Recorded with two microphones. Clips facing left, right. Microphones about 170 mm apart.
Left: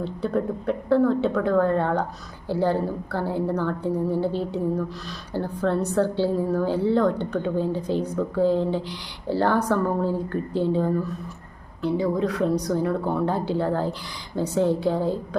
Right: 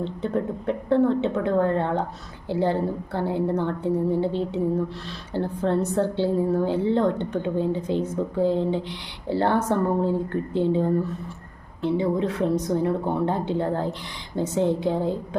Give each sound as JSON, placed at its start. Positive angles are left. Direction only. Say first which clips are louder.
{"t": 0.7, "sound": "speech", "louder": "even", "side_deg": -25}